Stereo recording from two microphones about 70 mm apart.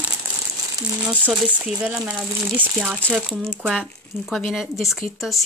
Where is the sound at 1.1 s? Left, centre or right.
Right.